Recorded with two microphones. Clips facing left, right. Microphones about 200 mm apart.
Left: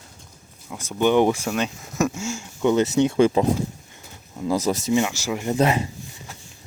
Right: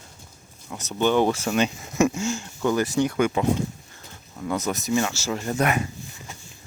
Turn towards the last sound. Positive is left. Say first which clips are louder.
# left 3 dB
turn(degrees=25)  # may be behind; listen again after turning